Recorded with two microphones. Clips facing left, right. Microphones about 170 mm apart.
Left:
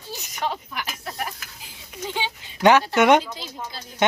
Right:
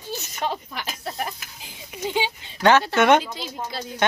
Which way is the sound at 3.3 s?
80° right.